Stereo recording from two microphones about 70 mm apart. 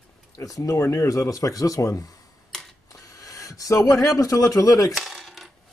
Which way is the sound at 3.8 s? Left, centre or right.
Left.